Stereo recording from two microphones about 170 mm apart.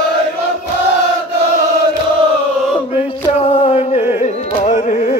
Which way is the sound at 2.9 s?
35° left (ahead or behind).